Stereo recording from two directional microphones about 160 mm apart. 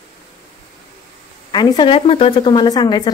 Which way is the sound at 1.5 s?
30° left (ahead or behind).